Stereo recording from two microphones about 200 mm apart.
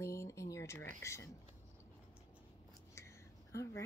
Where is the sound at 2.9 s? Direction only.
15° left (ahead or behind).